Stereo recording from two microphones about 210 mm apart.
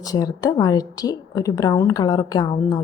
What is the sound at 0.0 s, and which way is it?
A woman's voice, 20° left (ahead or behind).